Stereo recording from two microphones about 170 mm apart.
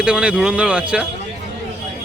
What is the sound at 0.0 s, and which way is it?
Speech, 5° right (ahead or behind).